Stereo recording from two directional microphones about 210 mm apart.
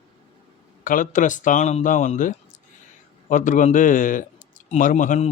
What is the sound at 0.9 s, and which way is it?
Speech, 40° left (ahead or behind).